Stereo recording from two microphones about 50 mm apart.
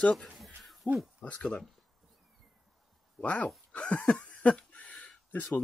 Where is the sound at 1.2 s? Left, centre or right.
Left.